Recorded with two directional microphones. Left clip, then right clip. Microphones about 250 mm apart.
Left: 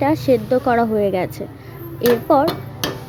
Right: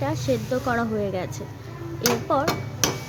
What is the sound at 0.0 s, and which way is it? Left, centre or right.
Speech, left.